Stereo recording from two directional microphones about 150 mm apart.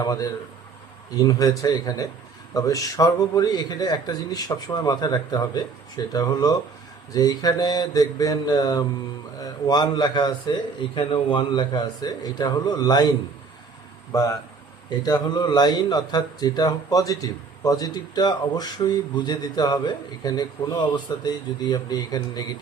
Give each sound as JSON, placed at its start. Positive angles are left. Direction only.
{"t": 0.0, "sound": "speech", "side_deg": 25}
{"t": 14.1, "sound": "speech", "side_deg": 20}